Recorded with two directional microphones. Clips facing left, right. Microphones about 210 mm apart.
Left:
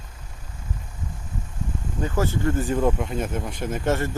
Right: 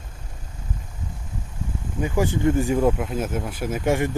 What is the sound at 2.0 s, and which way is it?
Speech, 15° right (ahead or behind).